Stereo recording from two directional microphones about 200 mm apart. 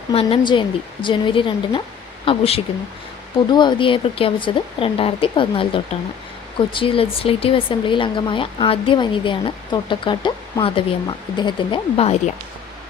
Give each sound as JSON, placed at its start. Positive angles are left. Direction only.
{"t": 0.1, "sound": "speech", "side_deg": 30}